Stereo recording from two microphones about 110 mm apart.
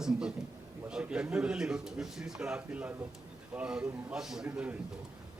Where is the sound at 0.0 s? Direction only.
5° right (ahead or behind).